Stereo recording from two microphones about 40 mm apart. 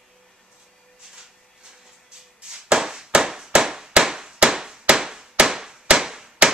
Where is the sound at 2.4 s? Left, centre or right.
Right.